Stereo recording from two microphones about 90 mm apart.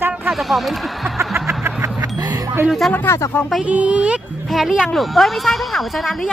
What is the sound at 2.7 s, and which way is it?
Speech, centre (ahead or behind).